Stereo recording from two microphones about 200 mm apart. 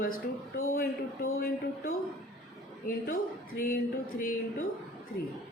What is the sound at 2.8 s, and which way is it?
Speech, 45° left (ahead or behind).